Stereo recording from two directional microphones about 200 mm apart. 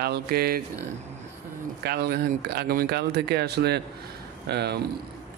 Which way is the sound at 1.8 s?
55° right (ahead or behind).